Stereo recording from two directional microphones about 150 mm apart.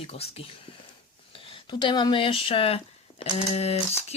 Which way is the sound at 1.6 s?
30° left (ahead or behind).